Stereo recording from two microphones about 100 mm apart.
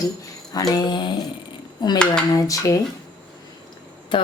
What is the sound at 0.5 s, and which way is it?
Speech, 40° left (ahead or behind).